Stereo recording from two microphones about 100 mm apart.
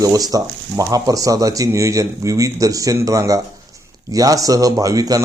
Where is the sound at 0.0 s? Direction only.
35° right (ahead or behind).